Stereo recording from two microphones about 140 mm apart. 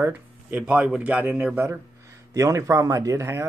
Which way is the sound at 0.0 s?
10° right (ahead or behind).